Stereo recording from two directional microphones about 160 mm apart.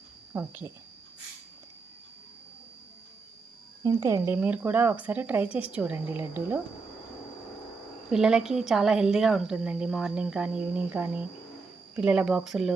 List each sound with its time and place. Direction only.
0.3 s speech: 15° right (ahead or behind)
3.8 s speech: 20° right (ahead or behind)
4.4 s speech: 10° right (ahead or behind)
8.1 s speech: 5° right (ahead or behind)